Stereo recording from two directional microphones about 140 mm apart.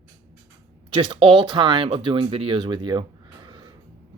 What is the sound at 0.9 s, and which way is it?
Speech, 35° right (ahead or behind).